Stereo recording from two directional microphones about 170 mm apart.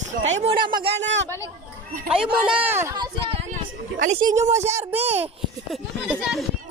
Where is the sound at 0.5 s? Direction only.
30° right (ahead or behind).